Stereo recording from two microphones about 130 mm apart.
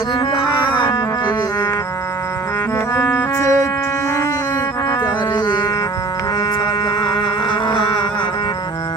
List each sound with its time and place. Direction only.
0.7 s music: 40° left (ahead or behind)
2.7 s music: 20° left (ahead or behind)
4.9 s a sound: 35° left (ahead or behind)